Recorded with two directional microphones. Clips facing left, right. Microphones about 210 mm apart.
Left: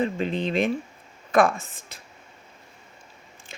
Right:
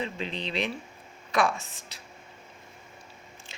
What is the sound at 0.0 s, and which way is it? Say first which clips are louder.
Speech: left 8 dB; 50° left (ahead or behind).